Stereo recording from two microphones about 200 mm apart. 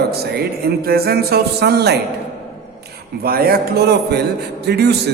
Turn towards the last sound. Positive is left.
turn(degrees=-55)  # may be behind; listen again after turning